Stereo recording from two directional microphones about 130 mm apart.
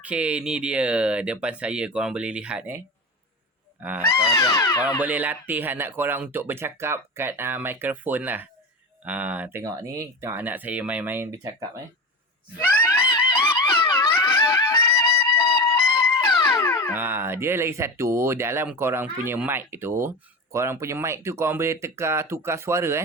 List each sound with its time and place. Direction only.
0.0 s speech: 10° right (ahead or behind)
4.1 s speech: 25° left (ahead or behind)
4.9 s speech: 10° right (ahead or behind)
12.5 s screaming: 15° left (ahead or behind)
13.1 s a sound: 35° left (ahead or behind)
14.3 s music: 20° left (ahead or behind)
16.9 s speech: 15° right (ahead or behind)